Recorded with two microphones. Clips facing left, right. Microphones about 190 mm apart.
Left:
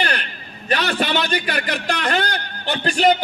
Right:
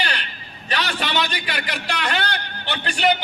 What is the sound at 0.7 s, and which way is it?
A man's voice, 50° left (ahead or behind).